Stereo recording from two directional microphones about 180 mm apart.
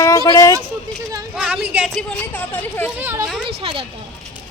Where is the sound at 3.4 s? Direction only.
30° right (ahead or behind).